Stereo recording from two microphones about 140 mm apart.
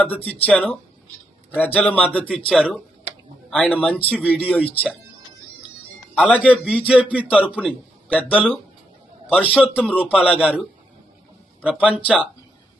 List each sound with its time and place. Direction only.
0.0 s a man's voice: 10° left (ahead or behind)
6.4 s a man's voice: 10° right (ahead or behind)
9.7 s a man's voice: 10° left (ahead or behind)
10.3 s a man's voice: 5° right (ahead or behind)
11.6 s a man's voice: 10° right (ahead or behind)